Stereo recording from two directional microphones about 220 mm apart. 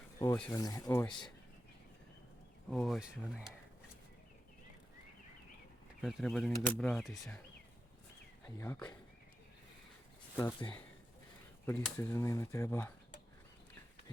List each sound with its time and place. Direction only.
0.4 s speech: 15° left (ahead or behind)
2.6 s speech: centre (ahead or behind)
6.0 s speech: centre (ahead or behind)
8.5 s speech: 10° left (ahead or behind)
10.3 s speech: 20° left (ahead or behind)